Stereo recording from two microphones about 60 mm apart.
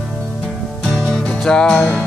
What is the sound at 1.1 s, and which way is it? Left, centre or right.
Music, centre.